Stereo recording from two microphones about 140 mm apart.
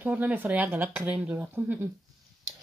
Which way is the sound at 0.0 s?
10° right (ahead or behind).